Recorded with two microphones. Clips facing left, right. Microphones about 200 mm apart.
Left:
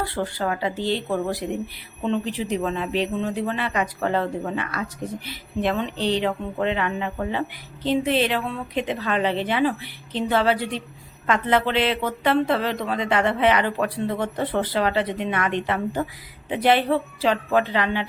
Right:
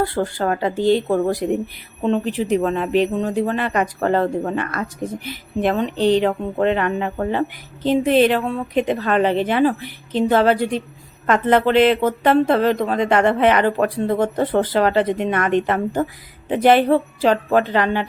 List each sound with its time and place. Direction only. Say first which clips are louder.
0.0 s speech: right 5 dB; 45° right (ahead or behind)